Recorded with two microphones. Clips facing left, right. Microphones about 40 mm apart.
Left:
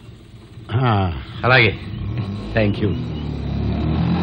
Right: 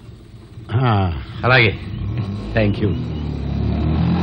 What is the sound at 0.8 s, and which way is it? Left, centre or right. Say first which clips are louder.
Speech: even; centre.